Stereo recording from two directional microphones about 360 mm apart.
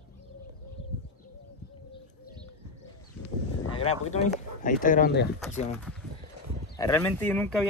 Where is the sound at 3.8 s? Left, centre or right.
Centre.